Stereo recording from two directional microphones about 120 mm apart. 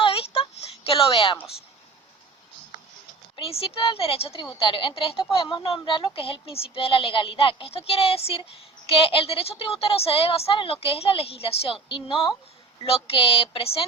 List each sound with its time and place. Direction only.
0.0 s a sound: 55° left (ahead or behind)
0.9 s a woman's voice: 50° left (ahead or behind)
3.3 s a woman's voice: 50° left (ahead or behind)